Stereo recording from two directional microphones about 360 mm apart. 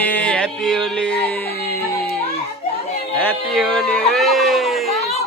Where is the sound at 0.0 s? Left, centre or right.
Centre.